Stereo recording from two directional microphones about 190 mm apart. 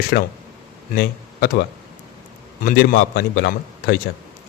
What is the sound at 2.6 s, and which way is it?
Speech, 55° left (ahead or behind).